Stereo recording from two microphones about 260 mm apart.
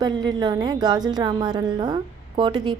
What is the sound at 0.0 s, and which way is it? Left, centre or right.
A woman's voice, centre.